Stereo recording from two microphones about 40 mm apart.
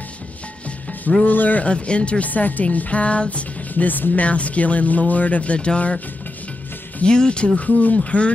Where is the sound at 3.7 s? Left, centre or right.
Left.